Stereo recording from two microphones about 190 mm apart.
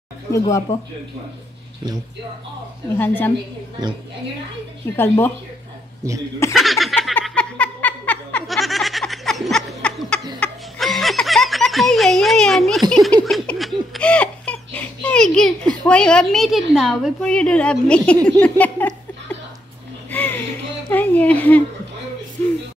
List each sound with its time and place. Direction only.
0.3 s speech: 15° left (ahead or behind)
3.0 s speech: 10° left (ahead or behind)
4.9 s speech: 10° left (ahead or behind)
6.0 s speech: 15° right (ahead or behind)
6.5 s a sound: centre (ahead or behind)
10.4 s music: centre (ahead or behind)
12.9 s giggle: centre (ahead or behind)
15.9 s a woman's voice: 5° left (ahead or behind)
20.1 s a sound: 10° left (ahead or behind)
20.9 s speech: 10° left (ahead or behind)